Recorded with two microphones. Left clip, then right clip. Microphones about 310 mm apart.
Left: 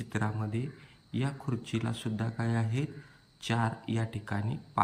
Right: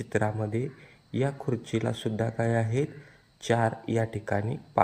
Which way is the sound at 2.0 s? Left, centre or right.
Right.